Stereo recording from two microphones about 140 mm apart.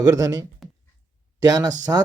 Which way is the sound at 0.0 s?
25° right (ahead or behind).